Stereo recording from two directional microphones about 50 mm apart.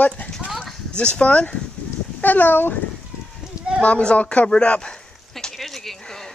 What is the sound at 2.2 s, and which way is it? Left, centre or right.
Speech, left.